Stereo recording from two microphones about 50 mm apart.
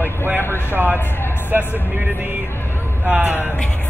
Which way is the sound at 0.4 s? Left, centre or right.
Left.